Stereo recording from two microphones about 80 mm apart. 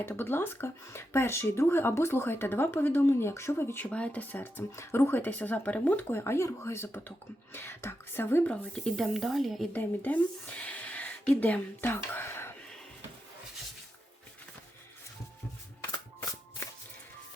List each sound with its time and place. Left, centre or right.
0.0 s speech: left
3.8 s speech: centre
8.4 s speech: centre
9.0 s speech: centre
9.7 s speech: centre